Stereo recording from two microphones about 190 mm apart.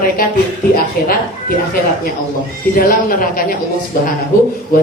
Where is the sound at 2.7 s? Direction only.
50° left (ahead or behind).